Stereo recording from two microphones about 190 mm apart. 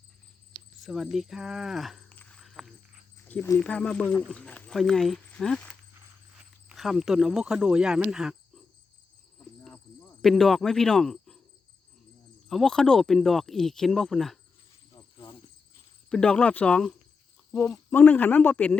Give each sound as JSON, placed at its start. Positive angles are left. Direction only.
{"t": 0.5, "sound": "a sound", "side_deg": 0}
{"t": 3.2, "sound": "speech", "side_deg": 10}
{"t": 6.7, "sound": "speech", "side_deg": 0}
{"t": 9.6, "sound": "cricket", "side_deg": 5}
{"t": 12.5, "sound": "speech", "side_deg": 0}
{"t": 14.9, "sound": "cricket", "side_deg": 25}
{"t": 16.0, "sound": "speech", "side_deg": 5}